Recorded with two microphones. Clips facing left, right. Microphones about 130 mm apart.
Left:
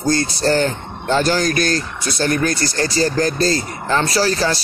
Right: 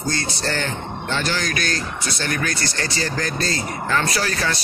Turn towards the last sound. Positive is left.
turn(degrees=30)  # may be behind; listen again after turning